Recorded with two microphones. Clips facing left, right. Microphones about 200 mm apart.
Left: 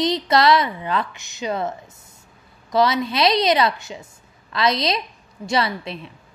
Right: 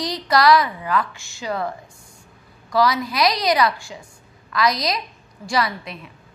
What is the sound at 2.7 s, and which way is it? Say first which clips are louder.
A woman's voice: left 1 dB; 25° left (ahead or behind).